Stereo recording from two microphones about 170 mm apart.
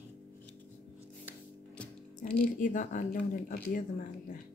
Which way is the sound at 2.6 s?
50° left (ahead or behind).